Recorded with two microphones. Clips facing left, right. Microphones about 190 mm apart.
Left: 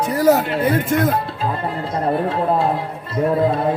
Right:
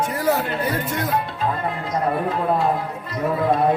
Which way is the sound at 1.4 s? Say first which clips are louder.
Left 1 dB; 30° left (ahead or behind).